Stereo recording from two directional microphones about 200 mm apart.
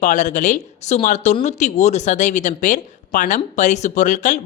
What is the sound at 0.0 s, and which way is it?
Speech, 40° left (ahead or behind).